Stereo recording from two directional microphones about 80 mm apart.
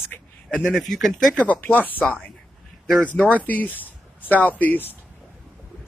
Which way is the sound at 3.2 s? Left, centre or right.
Centre.